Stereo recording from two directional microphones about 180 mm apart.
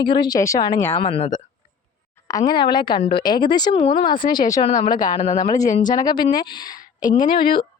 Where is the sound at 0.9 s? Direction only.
30° left (ahead or behind).